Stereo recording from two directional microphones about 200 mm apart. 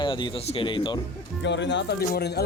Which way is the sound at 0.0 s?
25° left (ahead or behind).